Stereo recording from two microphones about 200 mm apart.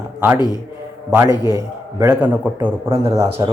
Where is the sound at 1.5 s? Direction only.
15° right (ahead or behind).